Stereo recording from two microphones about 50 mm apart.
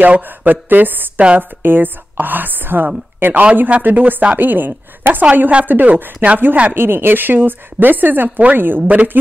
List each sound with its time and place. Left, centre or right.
0.0 s speech: right
0.5 s a woman's voice: right
6.7 s a woman's voice: right